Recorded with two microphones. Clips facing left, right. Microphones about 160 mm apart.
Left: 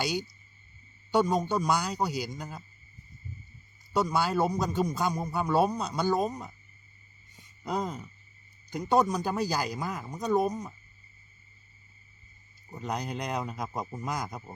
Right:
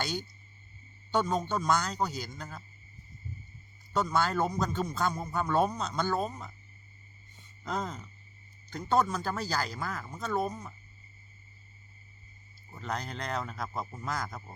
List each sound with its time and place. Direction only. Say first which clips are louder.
0.0 s a man's voice: left 4 dB; 10° left (ahead or behind)
3.9 s a man's voice: left 2 dB; 10° left (ahead or behind)
7.3 s a sound: left 3 dB; 10° left (ahead or behind)
8.7 s a man's voice: left 3 dB; 15° left (ahead or behind)
12.7 s a man's voice: left 3 dB; 15° left (ahead or behind)